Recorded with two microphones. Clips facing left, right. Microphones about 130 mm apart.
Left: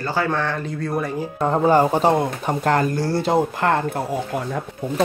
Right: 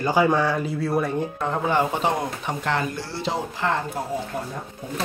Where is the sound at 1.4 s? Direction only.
40° left (ahead or behind); by 4.0 s 55° left (ahead or behind).